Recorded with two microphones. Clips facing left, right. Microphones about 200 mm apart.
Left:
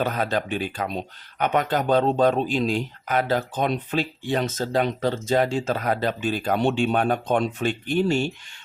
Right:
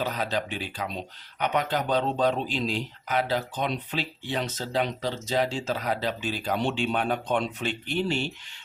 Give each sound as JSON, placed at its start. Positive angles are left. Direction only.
{"t": 0.0, "sound": "speech", "side_deg": 55}